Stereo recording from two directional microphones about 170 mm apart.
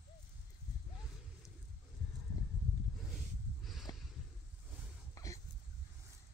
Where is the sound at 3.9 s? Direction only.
25° left (ahead or behind).